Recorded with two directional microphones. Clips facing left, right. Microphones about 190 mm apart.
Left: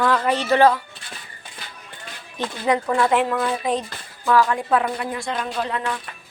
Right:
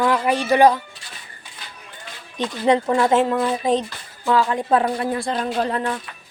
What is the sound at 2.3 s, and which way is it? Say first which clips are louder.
Speech: right 3 dB; 15° right (ahead or behind).